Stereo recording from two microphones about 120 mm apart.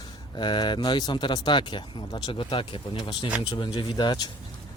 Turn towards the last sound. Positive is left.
turn(degrees=40)  # may be behind; listen again after turning